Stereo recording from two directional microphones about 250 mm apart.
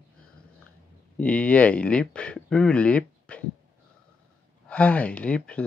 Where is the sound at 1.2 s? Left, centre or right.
Centre.